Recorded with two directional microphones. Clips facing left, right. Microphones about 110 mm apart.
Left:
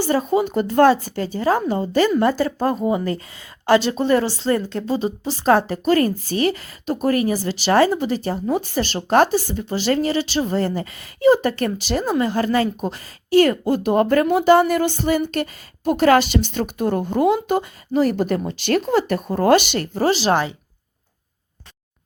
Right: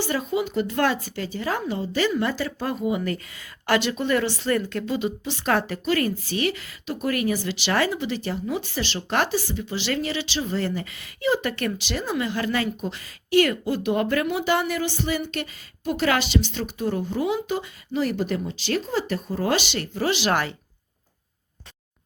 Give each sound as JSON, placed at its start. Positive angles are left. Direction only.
{"t": 0.0, "sound": "a woman's voice", "side_deg": 40}